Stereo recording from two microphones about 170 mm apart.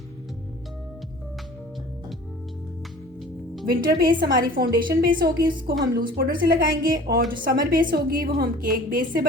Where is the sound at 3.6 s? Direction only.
60° right (ahead or behind).